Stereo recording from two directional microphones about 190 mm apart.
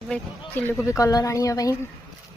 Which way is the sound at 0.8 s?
15° left (ahead or behind).